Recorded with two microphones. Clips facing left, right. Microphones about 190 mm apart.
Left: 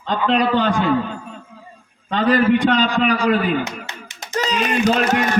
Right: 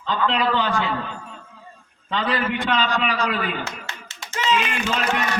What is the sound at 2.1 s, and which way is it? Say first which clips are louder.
Speech: left 9 dB; 45° left (ahead or behind).